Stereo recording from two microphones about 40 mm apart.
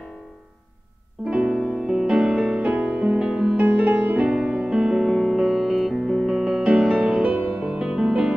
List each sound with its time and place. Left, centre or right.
1.2 s music: centre
3.5 s music: right
4.3 s music: centre
6.9 s music: centre
7.2 s music: right
7.6 s music: right